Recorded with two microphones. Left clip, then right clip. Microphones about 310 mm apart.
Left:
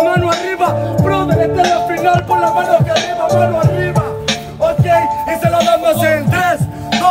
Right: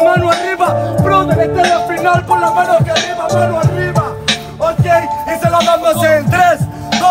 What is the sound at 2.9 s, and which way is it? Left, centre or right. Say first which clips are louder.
Music: left 1 dB; right.